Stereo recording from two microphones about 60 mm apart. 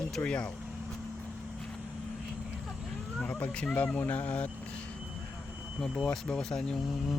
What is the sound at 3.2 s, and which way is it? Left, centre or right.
Speech, left.